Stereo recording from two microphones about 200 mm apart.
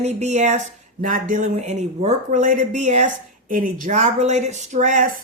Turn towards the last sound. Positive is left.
turn(degrees=-40)  # may be behind; listen again after turning